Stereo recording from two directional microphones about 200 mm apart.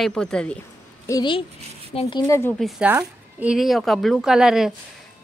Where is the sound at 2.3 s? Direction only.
10° left (ahead or behind).